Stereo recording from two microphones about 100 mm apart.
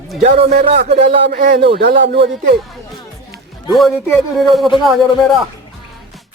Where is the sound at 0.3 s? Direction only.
75° right (ahead or behind).